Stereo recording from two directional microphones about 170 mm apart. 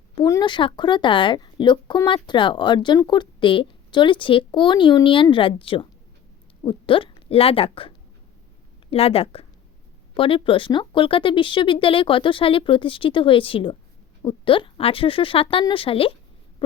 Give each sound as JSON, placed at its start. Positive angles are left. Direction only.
{"t": 0.2, "sound": "a woman's voice", "side_deg": 25}